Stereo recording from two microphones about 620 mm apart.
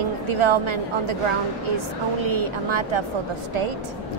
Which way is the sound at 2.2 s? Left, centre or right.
Right.